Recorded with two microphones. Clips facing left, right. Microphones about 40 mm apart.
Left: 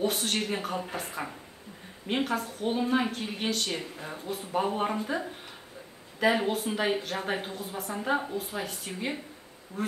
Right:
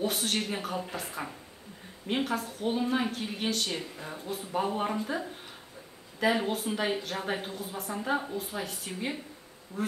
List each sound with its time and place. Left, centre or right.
0.0 s a woman's voice: centre